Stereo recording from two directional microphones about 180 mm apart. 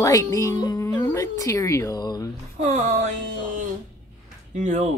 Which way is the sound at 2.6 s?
45° right (ahead or behind).